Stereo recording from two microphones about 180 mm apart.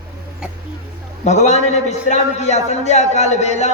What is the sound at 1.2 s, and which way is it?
A man's voice, 40° left (ahead or behind).